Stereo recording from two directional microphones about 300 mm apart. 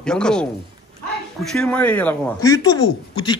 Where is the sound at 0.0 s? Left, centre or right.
Centre.